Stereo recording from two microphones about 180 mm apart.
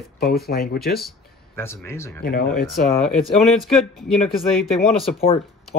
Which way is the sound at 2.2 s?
55° left (ahead or behind).